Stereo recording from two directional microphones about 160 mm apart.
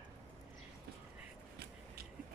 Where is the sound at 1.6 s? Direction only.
90° right.